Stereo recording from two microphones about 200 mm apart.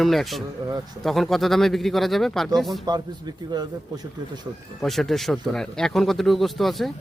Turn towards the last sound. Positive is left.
turn(degrees=0)  # may be behind; listen again after turning